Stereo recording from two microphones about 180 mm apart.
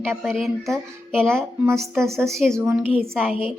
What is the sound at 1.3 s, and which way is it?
Speech, 15° right (ahead or behind).